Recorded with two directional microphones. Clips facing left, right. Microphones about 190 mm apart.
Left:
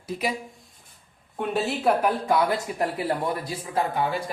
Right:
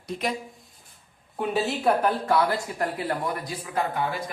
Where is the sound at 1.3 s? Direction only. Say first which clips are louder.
Even; centre (ahead or behind).